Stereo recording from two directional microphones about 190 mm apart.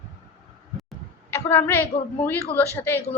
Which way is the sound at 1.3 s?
15° left (ahead or behind).